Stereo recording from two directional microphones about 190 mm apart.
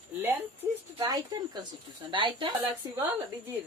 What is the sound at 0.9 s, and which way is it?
Speech, 20° right (ahead or behind).